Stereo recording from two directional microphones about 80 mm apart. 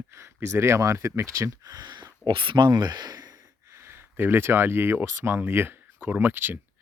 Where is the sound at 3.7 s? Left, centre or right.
Right.